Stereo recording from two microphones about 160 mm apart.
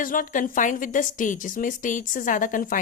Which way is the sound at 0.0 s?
60° left (ahead or behind).